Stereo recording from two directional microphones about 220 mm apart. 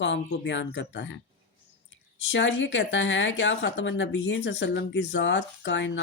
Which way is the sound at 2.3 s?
60° left (ahead or behind).